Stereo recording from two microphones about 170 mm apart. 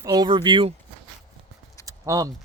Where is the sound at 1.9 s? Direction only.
20° right (ahead or behind).